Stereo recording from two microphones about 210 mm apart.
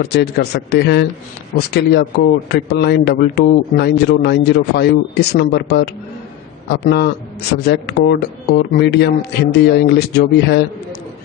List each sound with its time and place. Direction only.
0.0 s a man's voice: 50° left (ahead or behind)